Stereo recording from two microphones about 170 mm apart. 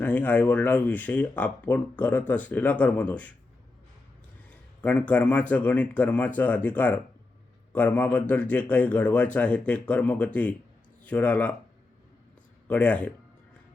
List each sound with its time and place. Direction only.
0.0 s speech: 10° left (ahead or behind)
4.8 s speech: 10° left (ahead or behind)
12.6 s speech: 10° left (ahead or behind)